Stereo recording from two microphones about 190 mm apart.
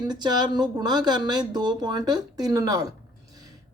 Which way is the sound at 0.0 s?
20° right (ahead or behind).